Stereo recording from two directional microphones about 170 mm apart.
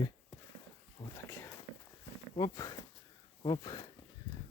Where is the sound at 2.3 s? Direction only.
20° left (ahead or behind).